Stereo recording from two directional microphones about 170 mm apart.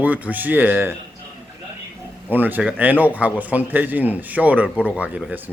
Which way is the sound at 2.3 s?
10° right (ahead or behind).